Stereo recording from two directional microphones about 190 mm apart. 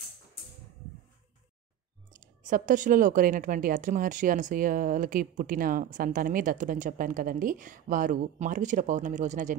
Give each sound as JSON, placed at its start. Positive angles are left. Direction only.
{"t": 2.1, "sound": "a woman's voice", "side_deg": -45}